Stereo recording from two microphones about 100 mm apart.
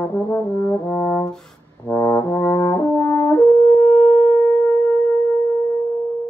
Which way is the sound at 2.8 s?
15° left (ahead or behind).